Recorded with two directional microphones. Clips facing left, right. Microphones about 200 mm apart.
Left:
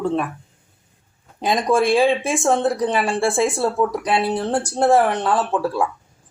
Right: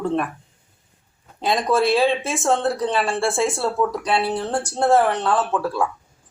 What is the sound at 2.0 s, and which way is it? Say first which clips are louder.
Speech: left 3 dB; 15° left (ahead or behind).